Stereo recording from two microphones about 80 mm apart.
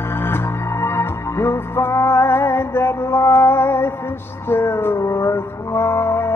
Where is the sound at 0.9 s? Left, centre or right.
Left.